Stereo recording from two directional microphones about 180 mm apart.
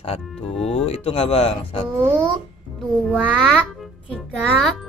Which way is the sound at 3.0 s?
5° right (ahead or behind).